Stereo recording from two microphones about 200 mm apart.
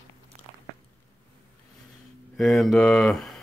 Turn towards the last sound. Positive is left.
turn(degrees=0)  # may be behind; listen again after turning